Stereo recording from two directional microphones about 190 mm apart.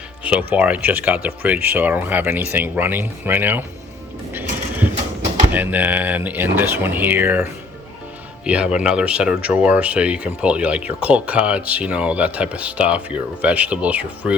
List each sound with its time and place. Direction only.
0.3 s speech: 5° right (ahead or behind)
5.5 s speech: 10° right (ahead or behind)
8.4 s speech: 5° right (ahead or behind)